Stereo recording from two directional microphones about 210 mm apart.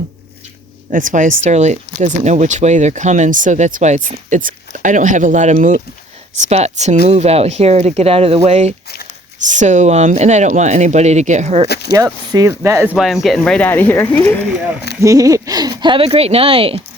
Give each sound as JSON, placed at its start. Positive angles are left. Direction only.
{"t": 0.9, "sound": "speech", "side_deg": -40}
{"t": 11.9, "sound": "speech", "side_deg": -15}
{"t": 13.2, "sound": "speech", "side_deg": 0}
{"t": 15.0, "sound": "speech", "side_deg": -15}